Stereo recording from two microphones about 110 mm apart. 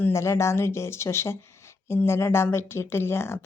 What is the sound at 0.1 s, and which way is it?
Speech, 25° left (ahead or behind).